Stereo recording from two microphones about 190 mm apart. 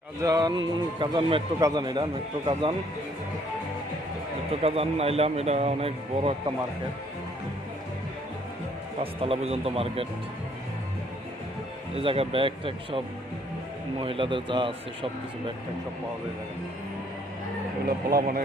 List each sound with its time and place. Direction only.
0.2 s a man's voice: 20° right (ahead or behind)
4.6 s speech: 30° right (ahead or behind)
9.2 s speech: 30° right (ahead or behind)
11.9 s a man's voice: 30° right (ahead or behind)
14.0 s a man's voice: 25° right (ahead or behind)
17.8 s speech: 50° right (ahead or behind)